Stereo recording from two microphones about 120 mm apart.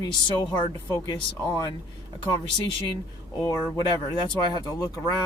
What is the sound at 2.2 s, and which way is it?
Speech, 40° left (ahead or behind).